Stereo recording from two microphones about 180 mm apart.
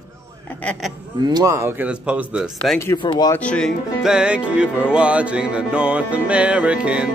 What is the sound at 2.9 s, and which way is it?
Speech, 25° left (ahead or behind).